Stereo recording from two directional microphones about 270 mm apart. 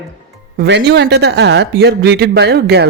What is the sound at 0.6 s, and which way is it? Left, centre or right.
Speech, right.